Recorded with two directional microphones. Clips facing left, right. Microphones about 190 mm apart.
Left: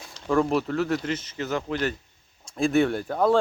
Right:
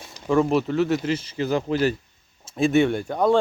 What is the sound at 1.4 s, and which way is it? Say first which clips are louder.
Speech: right 6 dB; 30° right (ahead or behind).